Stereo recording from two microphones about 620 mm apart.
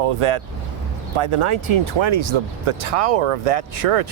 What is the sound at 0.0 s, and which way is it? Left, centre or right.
Speech, right.